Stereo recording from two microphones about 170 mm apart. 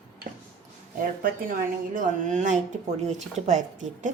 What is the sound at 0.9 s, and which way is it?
A woman's voice, 55° right (ahead or behind).